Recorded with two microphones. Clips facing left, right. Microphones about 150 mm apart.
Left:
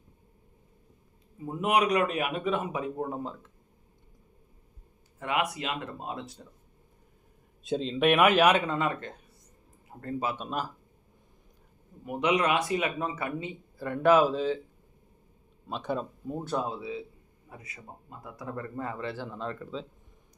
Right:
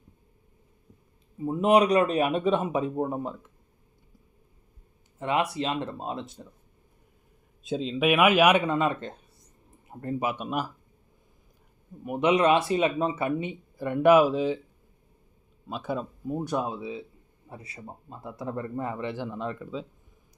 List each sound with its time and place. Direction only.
1.5 s speech: 30° right (ahead or behind)
5.2 s speech: 30° right (ahead or behind)
7.6 s speech: centre (ahead or behind)
12.0 s speech: 25° right (ahead or behind)
15.7 s speech: 5° right (ahead or behind); by 17.0 s 20° right (ahead or behind)
17.5 s speech: 30° right (ahead or behind); by 19.8 s 10° right (ahead or behind)